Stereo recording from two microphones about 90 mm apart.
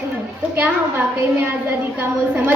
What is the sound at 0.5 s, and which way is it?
Speech, 25° right (ahead or behind).